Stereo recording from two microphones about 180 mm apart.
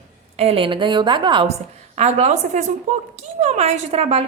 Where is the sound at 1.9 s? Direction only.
40° right (ahead or behind).